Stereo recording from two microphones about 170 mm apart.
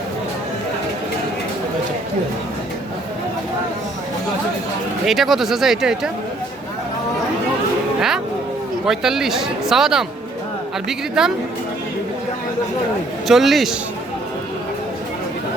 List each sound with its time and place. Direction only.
5.0 s speech: centre (ahead or behind)
8.9 s speech: centre (ahead or behind)
13.2 s speech: centre (ahead or behind)